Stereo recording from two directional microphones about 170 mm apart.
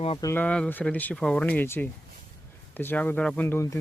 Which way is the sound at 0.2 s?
15° left (ahead or behind).